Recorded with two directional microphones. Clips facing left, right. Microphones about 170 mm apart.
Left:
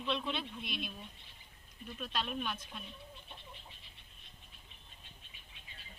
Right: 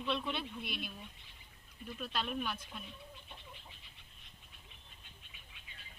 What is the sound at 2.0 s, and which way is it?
Speech, 5° right (ahead or behind).